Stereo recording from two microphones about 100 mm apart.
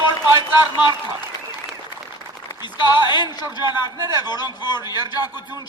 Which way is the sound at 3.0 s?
45° left (ahead or behind).